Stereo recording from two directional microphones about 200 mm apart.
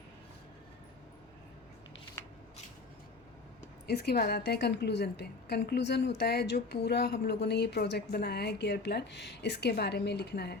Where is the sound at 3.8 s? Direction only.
50° left (ahead or behind).